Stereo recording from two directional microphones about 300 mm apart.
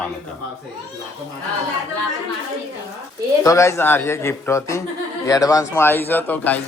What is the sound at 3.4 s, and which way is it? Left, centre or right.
A man's voice, centre.